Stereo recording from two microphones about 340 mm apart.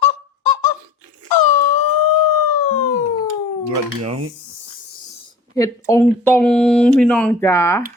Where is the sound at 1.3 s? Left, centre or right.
Left.